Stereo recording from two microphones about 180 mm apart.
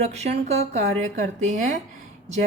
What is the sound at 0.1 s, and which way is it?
Speech, 35° right (ahead or behind).